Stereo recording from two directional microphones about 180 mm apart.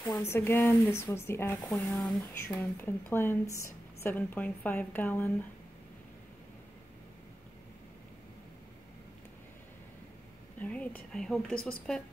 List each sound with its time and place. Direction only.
0.0 s a woman's voice: 15° left (ahead or behind)
1.7 s a woman's voice: centre (ahead or behind)
2.8 s a woman's voice: 15° left (ahead or behind)
10.6 s a woman's voice: 10° left (ahead or behind)